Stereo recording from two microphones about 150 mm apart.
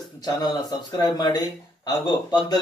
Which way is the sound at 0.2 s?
25° left (ahead or behind).